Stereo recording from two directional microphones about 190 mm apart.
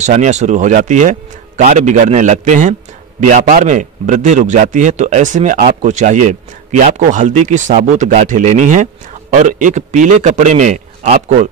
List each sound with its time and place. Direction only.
0.0 s speech: 40° right (ahead or behind)